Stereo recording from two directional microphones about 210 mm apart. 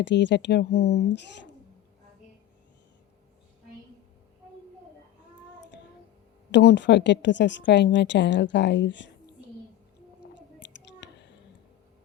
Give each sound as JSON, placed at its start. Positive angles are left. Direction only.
{"t": 0.0, "sound": "a woman's voice", "side_deg": 55}
{"t": 6.5, "sound": "a woman's voice", "side_deg": 55}
{"t": 10.6, "sound": "a sound", "side_deg": 55}